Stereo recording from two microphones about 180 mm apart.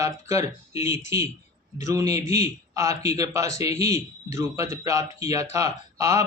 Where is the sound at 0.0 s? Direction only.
15° right (ahead or behind).